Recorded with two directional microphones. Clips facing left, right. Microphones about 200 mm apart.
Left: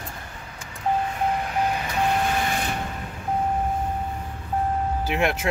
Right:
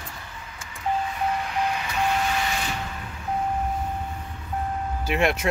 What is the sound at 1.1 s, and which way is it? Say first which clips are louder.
Vehicle: left 2 dB; 45° left (ahead or behind).